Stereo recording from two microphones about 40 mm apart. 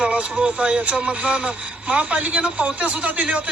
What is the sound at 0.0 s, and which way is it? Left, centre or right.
A man's voice, right.